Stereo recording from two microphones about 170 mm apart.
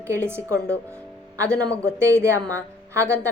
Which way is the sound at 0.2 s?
15° right (ahead or behind).